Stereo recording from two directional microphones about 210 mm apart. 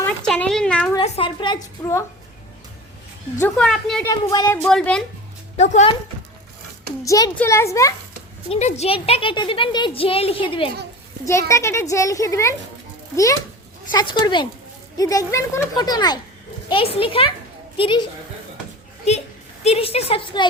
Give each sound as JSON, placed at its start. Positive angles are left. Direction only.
{"t": 0.0, "sound": "a sound", "side_deg": 5}
{"t": 0.9, "sound": "a woman's voice", "side_deg": 25}
{"t": 3.4, "sound": "a woman's voice", "side_deg": 5}
{"t": 4.0, "sound": "a child's voice", "side_deg": 15}
{"t": 4.6, "sound": "a woman's voice", "side_deg": 5}
{"t": 5.5, "sound": "speech", "side_deg": 35}
{"t": 7.0, "sound": "a child's voice", "side_deg": 15}
{"t": 8.4, "sound": "a child's voice", "side_deg": 30}
{"t": 11.3, "sound": "a child's voice", "side_deg": 15}
{"t": 13.9, "sound": "a child's voice", "side_deg": 20}
{"t": 19.1, "sound": "a child's voice", "side_deg": 30}